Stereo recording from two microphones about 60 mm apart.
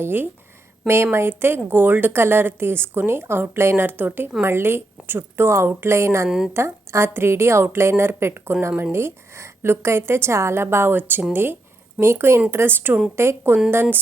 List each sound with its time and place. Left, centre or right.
0.0 s a woman's voice: right
6.2 s speech: centre
6.5 s a woman's voice: right